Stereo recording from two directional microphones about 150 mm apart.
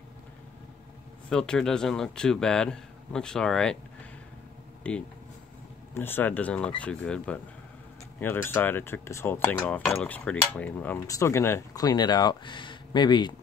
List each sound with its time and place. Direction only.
1.3 s speech: 5° left (ahead or behind)
4.9 s speech: 10° left (ahead or behind); by 13.4 s 30° left (ahead or behind)